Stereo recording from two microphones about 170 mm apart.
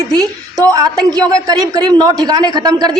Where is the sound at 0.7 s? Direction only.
20° right (ahead or behind).